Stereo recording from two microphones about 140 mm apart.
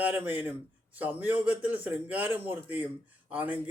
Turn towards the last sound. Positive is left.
turn(degrees=-10)  # may be behind; listen again after turning